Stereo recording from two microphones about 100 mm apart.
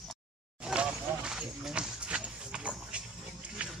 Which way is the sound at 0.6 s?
10° right (ahead or behind).